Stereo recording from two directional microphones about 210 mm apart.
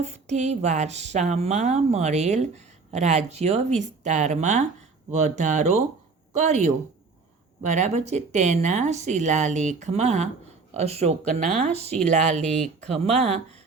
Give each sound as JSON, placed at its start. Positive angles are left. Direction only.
{"t": 0.0, "sound": "speech", "side_deg": -35}
{"t": 12.4, "sound": "speech", "side_deg": 0}
{"t": 12.8, "sound": "speech", "side_deg": -30}